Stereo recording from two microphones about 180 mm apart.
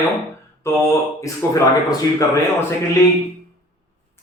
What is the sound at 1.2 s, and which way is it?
A man's voice, 20° left (ahead or behind).